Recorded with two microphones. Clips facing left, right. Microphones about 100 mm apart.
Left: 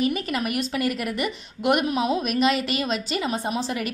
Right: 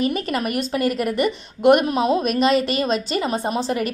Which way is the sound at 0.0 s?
40° right (ahead or behind).